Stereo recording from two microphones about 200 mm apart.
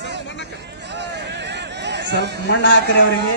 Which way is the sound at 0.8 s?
60° right (ahead or behind).